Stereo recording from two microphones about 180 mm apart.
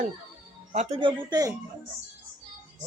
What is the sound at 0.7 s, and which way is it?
Speech, 35° right (ahead or behind).